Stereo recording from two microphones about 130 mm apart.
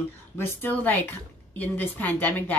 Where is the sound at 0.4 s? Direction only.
15° left (ahead or behind).